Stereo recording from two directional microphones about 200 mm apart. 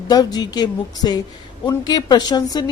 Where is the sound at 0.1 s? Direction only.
20° left (ahead or behind).